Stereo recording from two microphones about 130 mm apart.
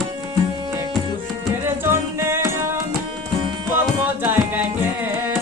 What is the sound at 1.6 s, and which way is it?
Music, 20° right (ahead or behind).